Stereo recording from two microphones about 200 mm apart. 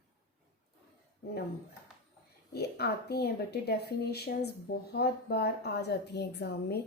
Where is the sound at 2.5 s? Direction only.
55° left (ahead or behind).